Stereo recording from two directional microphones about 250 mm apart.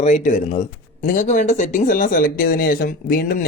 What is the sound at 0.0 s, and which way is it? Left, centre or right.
Speech, left.